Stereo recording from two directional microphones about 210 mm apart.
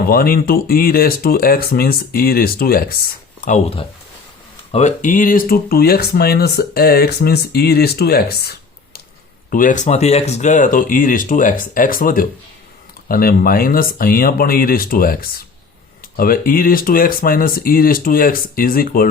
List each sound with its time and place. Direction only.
0.0 s speech: 45° left (ahead or behind)
3.4 s speech: 30° left (ahead or behind)